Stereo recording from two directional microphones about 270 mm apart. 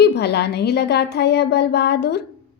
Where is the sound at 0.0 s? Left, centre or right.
Left.